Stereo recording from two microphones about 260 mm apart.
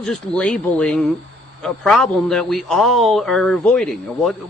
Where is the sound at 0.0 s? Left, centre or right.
Centre.